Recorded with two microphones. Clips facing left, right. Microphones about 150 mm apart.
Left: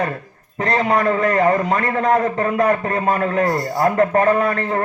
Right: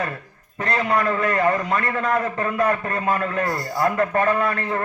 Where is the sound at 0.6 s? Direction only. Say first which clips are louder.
Left 4 dB; 35° left (ahead or behind).